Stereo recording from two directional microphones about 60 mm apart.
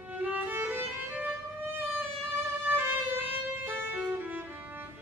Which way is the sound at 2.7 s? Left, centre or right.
Right.